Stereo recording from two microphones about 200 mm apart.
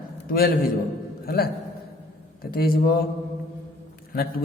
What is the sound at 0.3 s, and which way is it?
Speech, 45° left (ahead or behind).